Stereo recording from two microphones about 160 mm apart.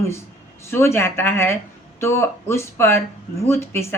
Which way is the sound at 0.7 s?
15° left (ahead or behind).